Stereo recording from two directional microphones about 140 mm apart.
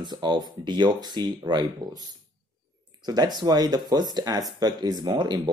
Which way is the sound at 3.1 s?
30° right (ahead or behind).